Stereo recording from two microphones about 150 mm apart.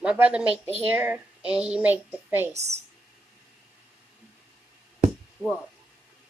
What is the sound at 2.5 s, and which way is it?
Speech, 45° right (ahead or behind).